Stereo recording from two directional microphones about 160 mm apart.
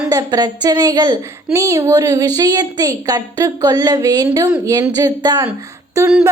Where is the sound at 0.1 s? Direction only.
25° right (ahead or behind).